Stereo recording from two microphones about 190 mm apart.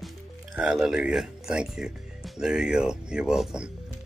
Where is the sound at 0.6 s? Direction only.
5° right (ahead or behind).